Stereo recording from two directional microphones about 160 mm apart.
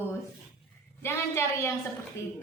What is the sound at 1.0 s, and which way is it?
Speech, 15° left (ahead or behind).